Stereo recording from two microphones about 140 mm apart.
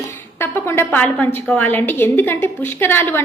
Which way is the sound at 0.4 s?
15° left (ahead or behind).